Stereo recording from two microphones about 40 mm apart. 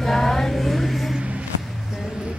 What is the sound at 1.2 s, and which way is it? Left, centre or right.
Music, right.